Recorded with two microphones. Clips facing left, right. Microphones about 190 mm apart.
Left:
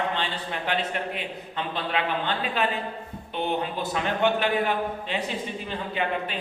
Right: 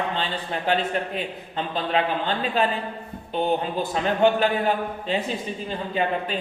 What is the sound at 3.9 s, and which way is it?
A man's voice, 40° right (ahead or behind).